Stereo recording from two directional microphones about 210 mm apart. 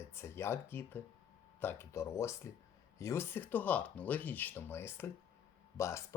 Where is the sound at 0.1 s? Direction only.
10° left (ahead or behind).